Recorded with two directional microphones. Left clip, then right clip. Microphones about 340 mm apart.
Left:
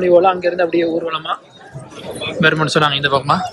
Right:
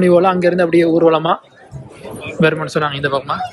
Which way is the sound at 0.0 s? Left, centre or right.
Centre.